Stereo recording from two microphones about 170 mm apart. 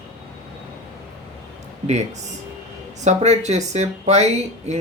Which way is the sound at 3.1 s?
40° right (ahead or behind).